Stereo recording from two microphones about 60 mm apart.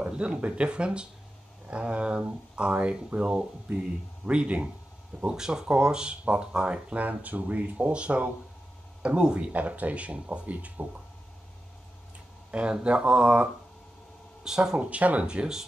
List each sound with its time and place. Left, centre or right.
0.0 s speech: centre
12.4 s speech: centre
14.8 s speech: right